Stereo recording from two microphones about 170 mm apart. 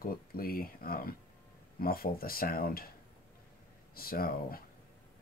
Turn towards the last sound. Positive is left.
turn(degrees=60)  # may be behind; listen again after turning